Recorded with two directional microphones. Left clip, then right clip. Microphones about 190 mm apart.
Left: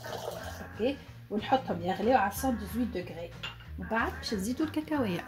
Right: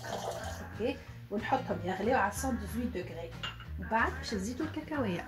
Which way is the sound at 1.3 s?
40° left (ahead or behind).